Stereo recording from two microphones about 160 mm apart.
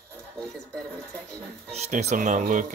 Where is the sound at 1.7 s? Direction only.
45° right (ahead or behind).